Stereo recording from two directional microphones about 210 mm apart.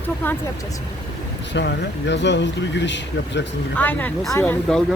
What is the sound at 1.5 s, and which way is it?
Speech, 55° left (ahead or behind).